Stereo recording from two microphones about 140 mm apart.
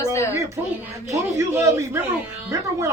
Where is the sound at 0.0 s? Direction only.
20° left (ahead or behind).